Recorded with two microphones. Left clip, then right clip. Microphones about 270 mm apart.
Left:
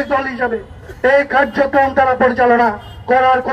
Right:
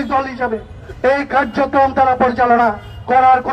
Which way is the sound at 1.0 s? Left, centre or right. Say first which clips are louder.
Left 2 dB; right.